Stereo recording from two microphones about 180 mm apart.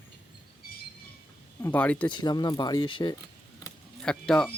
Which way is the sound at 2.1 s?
25° left (ahead or behind).